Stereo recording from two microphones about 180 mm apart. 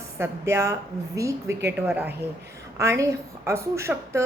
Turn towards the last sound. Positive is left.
turn(degrees=-15)  # may be behind; listen again after turning